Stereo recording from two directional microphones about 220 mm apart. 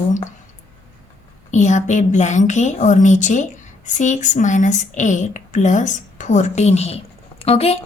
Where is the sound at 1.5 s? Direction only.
35° left (ahead or behind).